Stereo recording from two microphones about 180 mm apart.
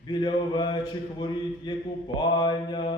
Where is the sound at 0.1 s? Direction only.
25° left (ahead or behind).